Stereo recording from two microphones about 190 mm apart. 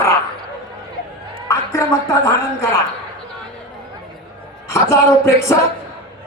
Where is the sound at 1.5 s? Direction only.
15° left (ahead or behind).